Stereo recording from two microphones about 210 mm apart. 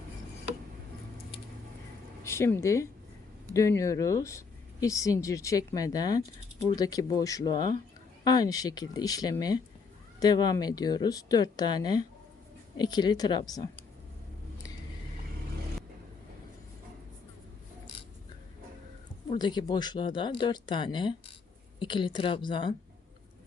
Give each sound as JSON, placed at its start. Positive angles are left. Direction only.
{"t": 2.2, "sound": "speech", "side_deg": 15}
{"t": 19.3, "sound": "speech", "side_deg": 20}